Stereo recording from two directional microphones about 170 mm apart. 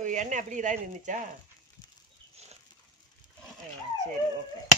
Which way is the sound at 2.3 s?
40° right (ahead or behind).